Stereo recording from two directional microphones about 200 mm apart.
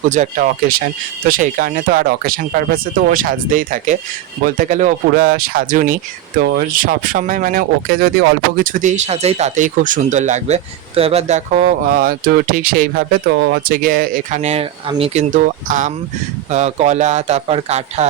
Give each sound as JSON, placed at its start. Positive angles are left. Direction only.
{"t": 0.1, "sound": "speech", "side_deg": -40}